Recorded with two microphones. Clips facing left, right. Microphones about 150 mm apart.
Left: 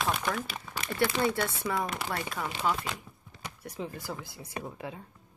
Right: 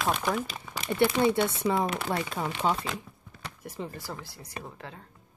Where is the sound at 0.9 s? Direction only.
20° right (ahead or behind).